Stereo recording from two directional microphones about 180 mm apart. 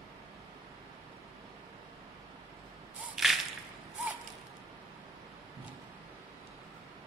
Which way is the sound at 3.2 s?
Centre (ahead or behind).